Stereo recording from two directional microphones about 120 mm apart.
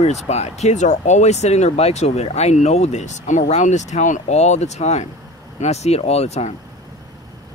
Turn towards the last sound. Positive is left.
turn(degrees=65)  # may be behind; listen again after turning